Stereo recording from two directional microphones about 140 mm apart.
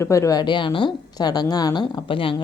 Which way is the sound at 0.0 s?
20° left (ahead or behind).